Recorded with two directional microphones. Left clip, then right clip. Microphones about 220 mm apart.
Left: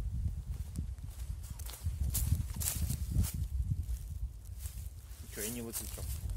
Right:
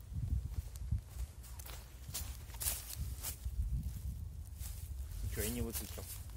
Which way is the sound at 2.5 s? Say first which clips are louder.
Left 1 dB; 15° left (ahead or behind).